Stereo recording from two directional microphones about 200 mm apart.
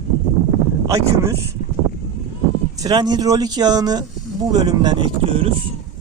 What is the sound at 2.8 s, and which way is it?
Speech, 20° right (ahead or behind).